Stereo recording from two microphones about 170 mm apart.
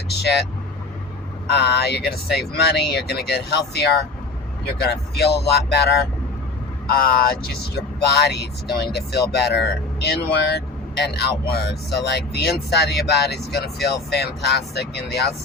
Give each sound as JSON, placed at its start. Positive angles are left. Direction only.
{"t": 0.1, "sound": "speech", "side_deg": 75}
{"t": 1.5, "sound": "speech", "side_deg": 75}
{"t": 6.9, "sound": "speech", "side_deg": 60}